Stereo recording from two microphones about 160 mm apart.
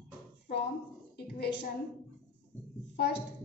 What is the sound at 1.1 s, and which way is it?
Speech, 90° left.